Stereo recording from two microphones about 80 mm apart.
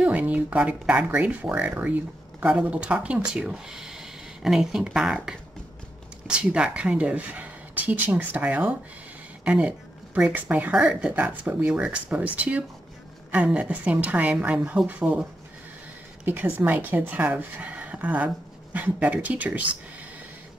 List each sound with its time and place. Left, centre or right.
0.0 s a woman's voice: centre
16.3 s speech: right